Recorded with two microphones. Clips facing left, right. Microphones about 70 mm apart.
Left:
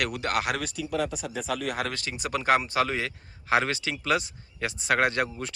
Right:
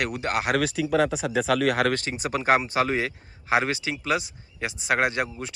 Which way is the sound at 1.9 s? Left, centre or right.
Right.